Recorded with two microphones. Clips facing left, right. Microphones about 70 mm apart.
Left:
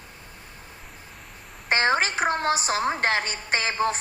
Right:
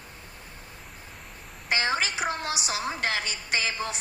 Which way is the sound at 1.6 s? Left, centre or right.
Left.